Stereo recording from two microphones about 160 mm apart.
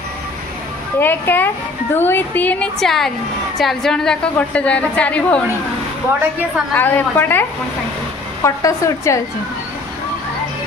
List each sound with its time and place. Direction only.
0.9 s a woman's voice: 15° left (ahead or behind)
6.7 s a woman's voice: 10° left (ahead or behind)
8.5 s a woman's voice: 20° left (ahead or behind)